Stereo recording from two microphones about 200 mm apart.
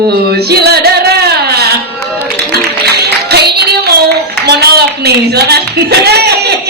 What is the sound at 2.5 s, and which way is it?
Music, 55° right (ahead or behind).